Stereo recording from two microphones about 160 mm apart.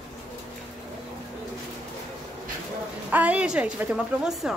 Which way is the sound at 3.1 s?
10° right (ahead or behind).